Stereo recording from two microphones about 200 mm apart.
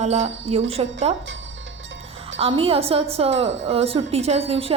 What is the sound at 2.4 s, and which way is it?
Speech, 25° right (ahead or behind).